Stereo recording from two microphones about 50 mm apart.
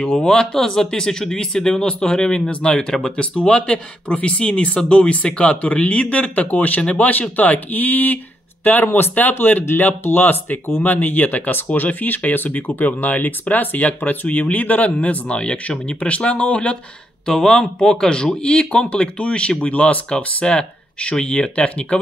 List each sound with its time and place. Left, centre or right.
0.2 s speech: centre
17.3 s speech: centre